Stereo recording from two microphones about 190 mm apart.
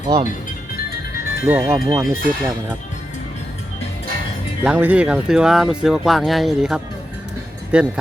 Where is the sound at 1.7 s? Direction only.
15° right (ahead or behind).